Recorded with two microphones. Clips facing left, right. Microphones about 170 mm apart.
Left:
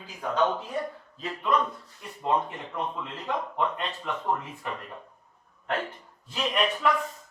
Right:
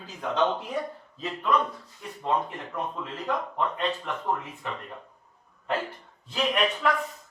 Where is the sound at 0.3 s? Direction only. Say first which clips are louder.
Even; 20° right (ahead or behind).